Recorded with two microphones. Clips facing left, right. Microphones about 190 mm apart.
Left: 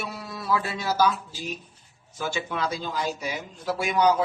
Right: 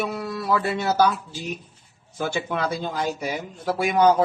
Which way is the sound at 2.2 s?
55° right (ahead or behind).